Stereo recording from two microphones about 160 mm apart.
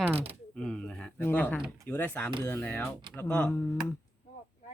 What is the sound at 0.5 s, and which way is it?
Speech, 5° left (ahead or behind).